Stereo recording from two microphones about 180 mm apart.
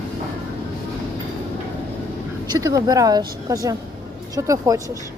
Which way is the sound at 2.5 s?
20° right (ahead or behind).